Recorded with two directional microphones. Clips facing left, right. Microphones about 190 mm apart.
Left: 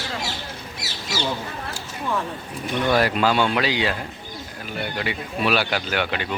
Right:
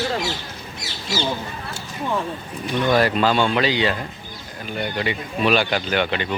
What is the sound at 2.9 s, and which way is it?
Speech, 5° left (ahead or behind).